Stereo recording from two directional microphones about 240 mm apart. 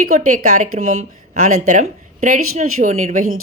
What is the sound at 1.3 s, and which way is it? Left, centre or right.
Speech, right.